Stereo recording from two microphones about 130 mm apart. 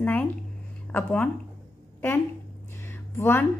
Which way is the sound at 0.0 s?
10° left (ahead or behind).